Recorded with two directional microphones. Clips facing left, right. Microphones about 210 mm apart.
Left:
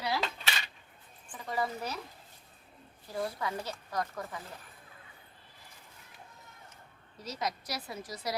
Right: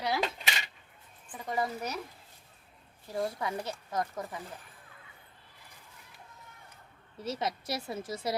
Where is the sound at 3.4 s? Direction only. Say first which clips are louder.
Right 1 dB; 25° right (ahead or behind).